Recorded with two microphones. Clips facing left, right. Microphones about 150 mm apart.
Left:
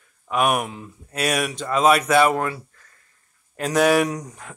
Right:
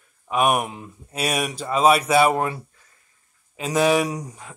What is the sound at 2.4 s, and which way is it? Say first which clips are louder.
Speech: right 1 dB; 20° right (ahead or behind).